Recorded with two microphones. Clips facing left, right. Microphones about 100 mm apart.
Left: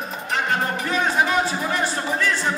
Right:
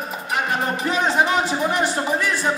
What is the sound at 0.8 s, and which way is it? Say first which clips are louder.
Speech: right 2 dB; 20° right (ahead or behind).